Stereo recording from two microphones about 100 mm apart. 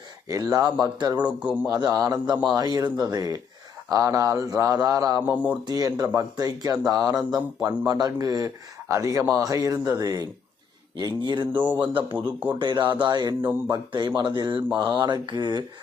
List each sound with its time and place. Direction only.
0.3 s speech: 35° right (ahead or behind)
0.9 s mantra: 45° right (ahead or behind)
1.2 s a man's voice: 10° right (ahead or behind)
1.8 s speech: 40° right (ahead or behind)
5.2 s a man's voice: 15° right (ahead or behind)
5.6 s speech: 40° right (ahead or behind)
10.9 s mantra: 50° right (ahead or behind)
11.5 s a man's voice: 20° right (ahead or behind)
12.5 s mantra: 50° right (ahead or behind)